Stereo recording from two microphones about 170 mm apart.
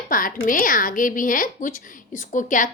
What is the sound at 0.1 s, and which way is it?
A woman's voice, 55° left (ahead or behind).